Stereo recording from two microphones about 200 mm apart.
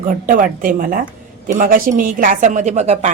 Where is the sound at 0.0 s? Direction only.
40° right (ahead or behind).